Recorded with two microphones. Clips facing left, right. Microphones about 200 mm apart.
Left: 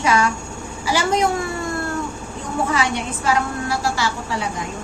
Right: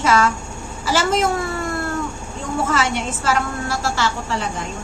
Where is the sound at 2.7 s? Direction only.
15° left (ahead or behind).